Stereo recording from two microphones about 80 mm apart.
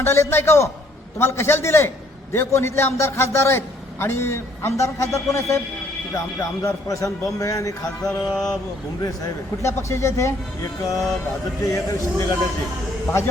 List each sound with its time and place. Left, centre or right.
0.0 s a man's voice: left
6.6 s a man's voice: left
8.3 s speech: centre
9.0 s a man's voice: left
9.6 s a man's voice: left